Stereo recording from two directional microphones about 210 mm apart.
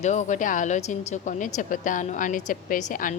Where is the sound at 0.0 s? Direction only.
35° left (ahead or behind).